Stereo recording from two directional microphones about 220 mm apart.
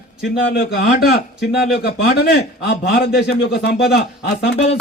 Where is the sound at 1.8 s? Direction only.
45° left (ahead or behind).